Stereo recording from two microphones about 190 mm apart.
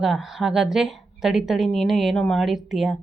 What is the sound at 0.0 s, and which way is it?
Speech, 5° right (ahead or behind).